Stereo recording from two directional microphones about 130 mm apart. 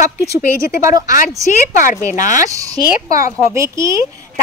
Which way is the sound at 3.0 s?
75° left (ahead or behind).